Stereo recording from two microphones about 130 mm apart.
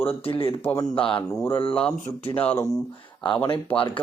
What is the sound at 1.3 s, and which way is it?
Speech, 20° left (ahead or behind).